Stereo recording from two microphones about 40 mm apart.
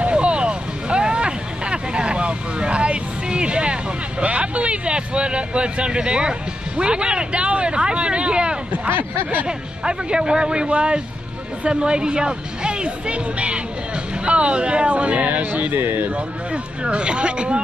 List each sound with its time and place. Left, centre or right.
0.0 s vehicle: right
6.8 s speech: right
8.8 s speech: right
9.5 s speech: right
15.7 s speech: right
16.8 s speech: right